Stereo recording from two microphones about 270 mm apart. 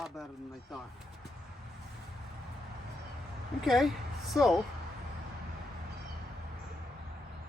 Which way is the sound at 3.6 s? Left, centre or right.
Centre.